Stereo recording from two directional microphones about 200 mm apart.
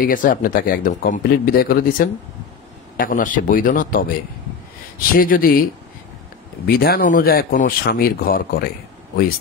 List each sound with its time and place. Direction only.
0.0 s speech: 40° left (ahead or behind)
5.1 s speech: 45° left (ahead or behind)